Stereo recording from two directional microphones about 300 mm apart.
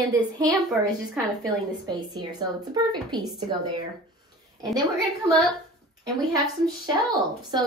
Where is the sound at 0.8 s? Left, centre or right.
Centre.